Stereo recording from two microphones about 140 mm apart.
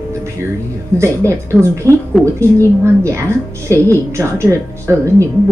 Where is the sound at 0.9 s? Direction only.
20° right (ahead or behind).